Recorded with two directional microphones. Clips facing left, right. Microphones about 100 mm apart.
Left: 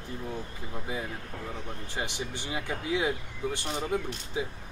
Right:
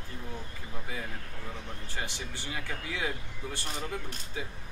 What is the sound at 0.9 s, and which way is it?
Speech, 20° left (ahead or behind).